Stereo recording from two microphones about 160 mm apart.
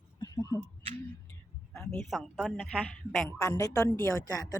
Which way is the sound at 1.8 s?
Centre (ahead or behind).